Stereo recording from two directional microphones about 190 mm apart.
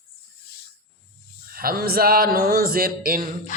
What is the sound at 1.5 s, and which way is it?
A man's voice, 50° right (ahead or behind).